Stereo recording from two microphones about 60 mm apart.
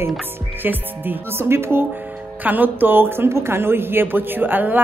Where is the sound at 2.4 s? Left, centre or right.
Right.